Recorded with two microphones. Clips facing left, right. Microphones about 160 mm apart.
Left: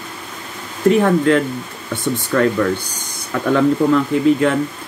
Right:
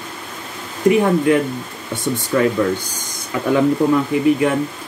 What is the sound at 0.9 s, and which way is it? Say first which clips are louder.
Speech: left 1 dB; 15° right (ahead or behind).